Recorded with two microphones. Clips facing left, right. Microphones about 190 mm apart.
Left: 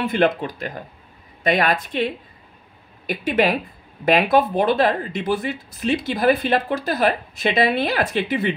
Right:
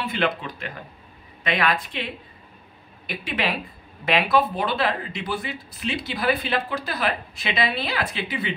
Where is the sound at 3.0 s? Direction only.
45° left (ahead or behind).